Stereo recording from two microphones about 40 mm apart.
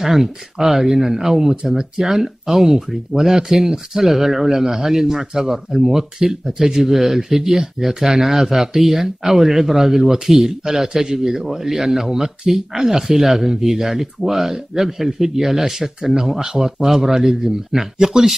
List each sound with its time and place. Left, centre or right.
0.0 s speech: centre
2.0 s speech: centre